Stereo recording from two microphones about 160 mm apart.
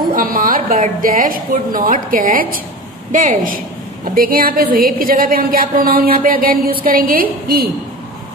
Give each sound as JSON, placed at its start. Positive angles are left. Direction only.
{"t": 0.1, "sound": "a woman's voice", "side_deg": -60}